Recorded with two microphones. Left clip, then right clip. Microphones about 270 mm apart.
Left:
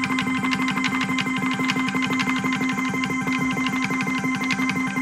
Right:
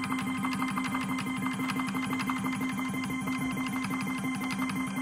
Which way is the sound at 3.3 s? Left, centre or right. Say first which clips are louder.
Left 10 dB; centre.